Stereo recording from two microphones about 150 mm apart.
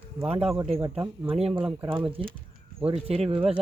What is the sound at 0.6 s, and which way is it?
Speech, 40° right (ahead or behind).